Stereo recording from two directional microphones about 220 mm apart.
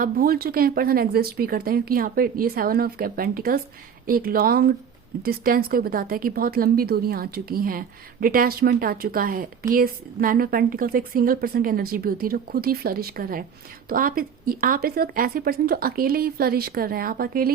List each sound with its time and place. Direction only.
0.0 s a woman's voice: 40° right (ahead or behind)